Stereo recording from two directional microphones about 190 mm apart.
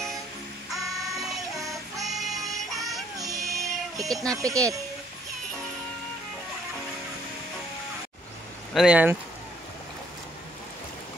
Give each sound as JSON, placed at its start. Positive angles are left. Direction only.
{"t": 0.7, "sound": "music", "side_deg": 0}
{"t": 3.2, "sound": "music", "side_deg": -15}
{"t": 3.9, "sound": "speech", "side_deg": 0}
{"t": 4.2, "sound": "speech", "side_deg": -15}
{"t": 8.7, "sound": "speech", "side_deg": -5}